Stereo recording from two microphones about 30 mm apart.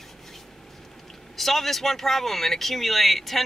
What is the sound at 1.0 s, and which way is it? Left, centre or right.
Speech, centre.